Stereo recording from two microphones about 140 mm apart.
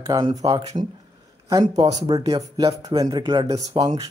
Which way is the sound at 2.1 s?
25° right (ahead or behind).